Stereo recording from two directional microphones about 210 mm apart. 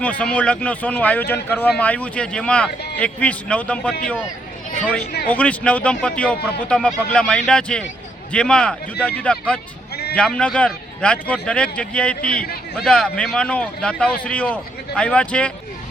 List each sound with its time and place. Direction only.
0.0 s a man's voice: 5° left (ahead or behind)
5.3 s a man's voice: 5° left (ahead or behind)
9.9 s sheep: 50° left (ahead or behind)
10.2 s a man's voice: 5° left (ahead or behind)